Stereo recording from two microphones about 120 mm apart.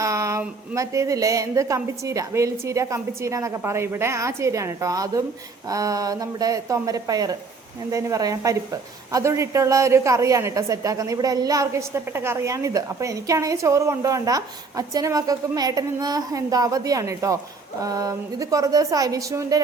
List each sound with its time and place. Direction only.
0.0 s a woman's voice: 25° right (ahead or behind)